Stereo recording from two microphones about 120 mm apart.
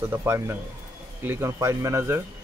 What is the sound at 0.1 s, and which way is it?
Speech, 20° right (ahead or behind).